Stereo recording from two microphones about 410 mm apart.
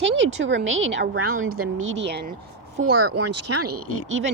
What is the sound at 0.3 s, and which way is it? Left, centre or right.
A woman's voice, right.